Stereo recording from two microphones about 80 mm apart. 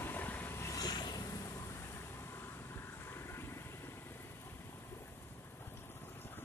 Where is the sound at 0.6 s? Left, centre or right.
Left.